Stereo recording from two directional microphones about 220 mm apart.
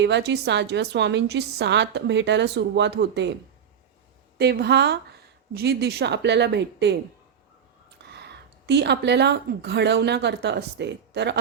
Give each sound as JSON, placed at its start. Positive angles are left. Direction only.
{"t": 0.0, "sound": "a woman's voice", "side_deg": -50}
{"t": 4.4, "sound": "a woman's voice", "side_deg": -45}